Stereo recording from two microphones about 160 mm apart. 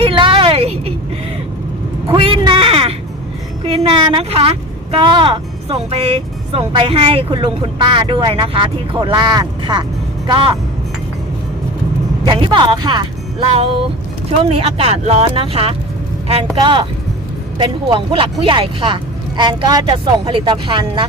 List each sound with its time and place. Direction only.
0.0 s vehicle: 35° right (ahead or behind)
2.0 s a sound: 35° right (ahead or behind)
3.6 s a woman's voice: 35° right (ahead or behind)
12.2 s a woman's voice: 30° right (ahead or behind)